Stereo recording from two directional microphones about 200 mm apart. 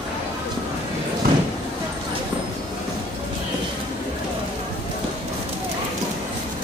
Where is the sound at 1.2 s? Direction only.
45° right (ahead or behind).